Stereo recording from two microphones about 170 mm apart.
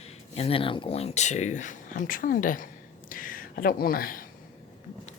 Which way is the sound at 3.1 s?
55° left (ahead or behind).